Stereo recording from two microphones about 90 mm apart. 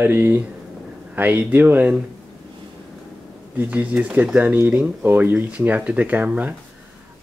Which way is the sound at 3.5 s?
15° right (ahead or behind).